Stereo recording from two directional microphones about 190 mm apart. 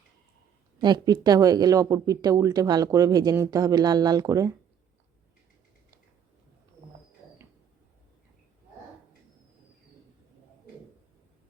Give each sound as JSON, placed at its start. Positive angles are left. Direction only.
{"t": 0.8, "sound": "speech", "side_deg": -20}